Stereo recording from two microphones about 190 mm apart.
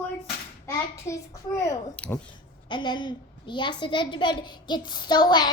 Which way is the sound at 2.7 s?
25° left (ahead or behind).